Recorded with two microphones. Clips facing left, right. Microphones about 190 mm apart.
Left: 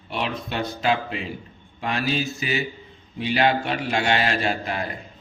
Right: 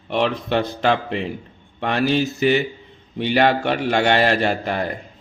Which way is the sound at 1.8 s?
60° right (ahead or behind).